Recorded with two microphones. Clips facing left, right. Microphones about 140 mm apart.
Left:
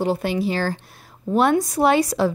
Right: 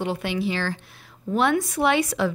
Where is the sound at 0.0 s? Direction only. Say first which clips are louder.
Left 4 dB; 40° left (ahead or behind).